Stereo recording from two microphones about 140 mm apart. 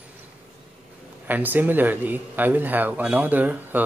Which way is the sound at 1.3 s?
15° right (ahead or behind).